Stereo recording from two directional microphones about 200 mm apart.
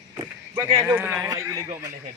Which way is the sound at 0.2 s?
20° right (ahead or behind).